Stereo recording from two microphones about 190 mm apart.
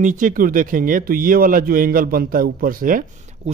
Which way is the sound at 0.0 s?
45° right (ahead or behind).